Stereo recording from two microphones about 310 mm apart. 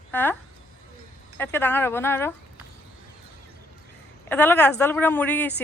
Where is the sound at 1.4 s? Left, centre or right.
Centre.